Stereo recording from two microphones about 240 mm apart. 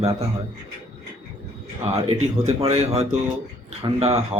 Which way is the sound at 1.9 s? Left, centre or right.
Right.